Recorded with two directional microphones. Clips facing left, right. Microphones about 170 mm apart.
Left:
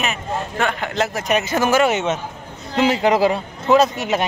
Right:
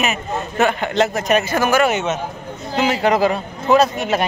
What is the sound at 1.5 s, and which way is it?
Speech, 25° left (ahead or behind).